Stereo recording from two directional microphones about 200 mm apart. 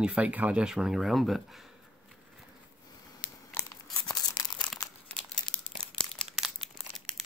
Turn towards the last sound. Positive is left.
turn(degrees=0)  # may be behind; listen again after turning